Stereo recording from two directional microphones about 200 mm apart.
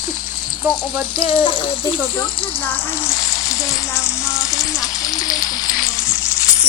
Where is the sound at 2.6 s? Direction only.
10° left (ahead or behind).